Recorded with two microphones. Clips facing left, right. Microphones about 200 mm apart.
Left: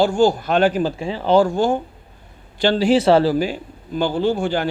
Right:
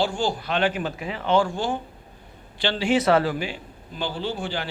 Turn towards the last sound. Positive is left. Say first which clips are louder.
# left 9 dB
turn(degrees=45)  # may be behind; listen again after turning